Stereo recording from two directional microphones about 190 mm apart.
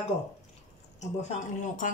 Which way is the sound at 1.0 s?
40° left (ahead or behind).